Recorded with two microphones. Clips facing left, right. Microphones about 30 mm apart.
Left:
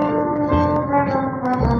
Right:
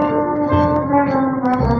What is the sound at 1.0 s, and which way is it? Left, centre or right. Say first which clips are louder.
Brass instrument: right 3 dB; centre.